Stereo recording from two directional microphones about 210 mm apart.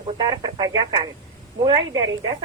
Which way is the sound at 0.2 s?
20° right (ahead or behind).